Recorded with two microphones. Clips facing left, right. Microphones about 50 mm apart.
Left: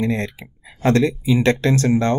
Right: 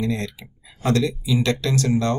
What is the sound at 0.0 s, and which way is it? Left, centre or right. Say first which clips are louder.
Speech: left 3 dB; left.